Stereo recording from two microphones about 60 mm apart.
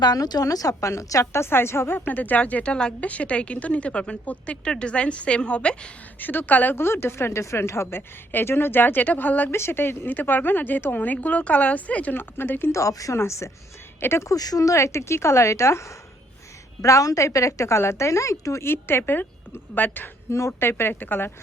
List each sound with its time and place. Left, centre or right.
0.2 s a woman's voice: left
2.0 s a woman's voice: left
6.1 s a woman's voice: left
6.7 s a woman's voice: left
9.5 s speech: left
10.1 s a woman's voice: left
12.1 s a woman's voice: left
12.7 s speech: left
13.1 s speech: left
14.3 s a woman's voice: left
16.8 s a woman's voice: left
18.7 s a woman's voice: left
20.3 s a woman's voice: left